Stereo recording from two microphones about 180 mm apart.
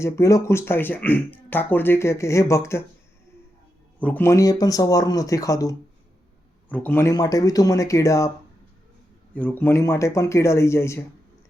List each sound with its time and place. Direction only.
0.0 s speech: 15° left (ahead or behind)
4.0 s speech: 10° left (ahead or behind)
6.7 s speech: 10° left (ahead or behind)
9.3 s speech: 10° left (ahead or behind)